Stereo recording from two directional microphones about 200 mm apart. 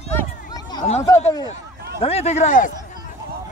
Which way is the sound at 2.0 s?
30° left (ahead or behind).